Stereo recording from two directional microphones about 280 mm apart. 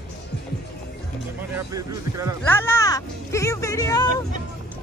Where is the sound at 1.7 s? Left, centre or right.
Centre.